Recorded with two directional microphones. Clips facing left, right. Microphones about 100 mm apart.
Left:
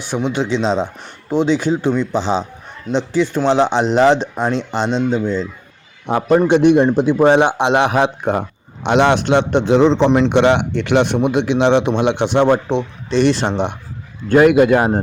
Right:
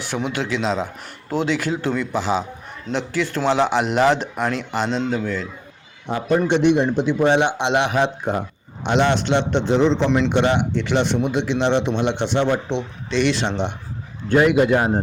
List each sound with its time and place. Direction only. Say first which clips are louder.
0.3 s speech: left 6 dB; 20° left (ahead or behind)
6.1 s a man's voice: left 6 dB; 60° left (ahead or behind)
6.4 s a man's voice: left 5 dB; 45° left (ahead or behind)
9.7 s a man's voice: left 5 dB; 65° left (ahead or behind)
10.1 s a man's voice: left 5 dB; 45° left (ahead or behind)
10.3 s a man's voice: left 5 dB; 75° left (ahead or behind); by 13.7 s 50° left (ahead or behind)
14.3 s a man's voice: left 5 dB; 60° left (ahead or behind)